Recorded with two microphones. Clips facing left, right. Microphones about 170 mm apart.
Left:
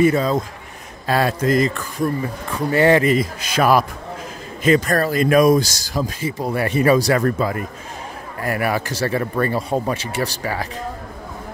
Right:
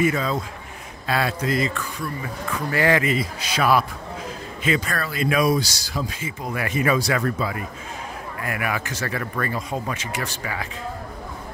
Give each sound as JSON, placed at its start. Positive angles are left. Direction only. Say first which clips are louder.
{"t": 0.0, "sound": "speech", "louder": "left 6 dB", "side_deg": 35}
{"t": 2.7, "sound": "speech", "louder": "left 6 dB", "side_deg": 25}
{"t": 3.1, "sound": "speech", "louder": "left 6 dB", "side_deg": 50}
{"t": 8.4, "sound": "speech", "louder": "left 6 dB", "side_deg": 35}